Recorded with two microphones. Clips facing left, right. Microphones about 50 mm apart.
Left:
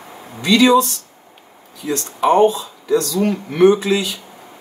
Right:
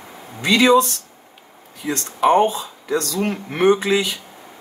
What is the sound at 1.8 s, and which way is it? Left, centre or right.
Speech, right.